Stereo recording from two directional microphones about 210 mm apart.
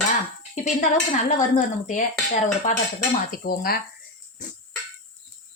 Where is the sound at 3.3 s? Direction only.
45° left (ahead or behind).